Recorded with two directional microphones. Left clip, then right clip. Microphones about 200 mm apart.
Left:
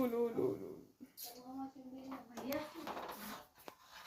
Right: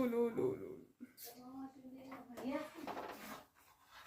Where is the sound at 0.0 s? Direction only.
10° right (ahead or behind).